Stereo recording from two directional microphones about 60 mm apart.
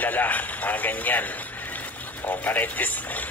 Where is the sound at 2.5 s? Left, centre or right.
Left.